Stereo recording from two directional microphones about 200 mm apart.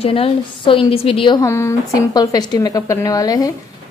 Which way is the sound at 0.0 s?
30° left (ahead or behind).